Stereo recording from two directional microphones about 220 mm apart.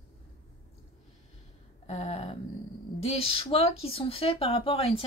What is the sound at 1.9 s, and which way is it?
A woman's voice, 25° left (ahead or behind).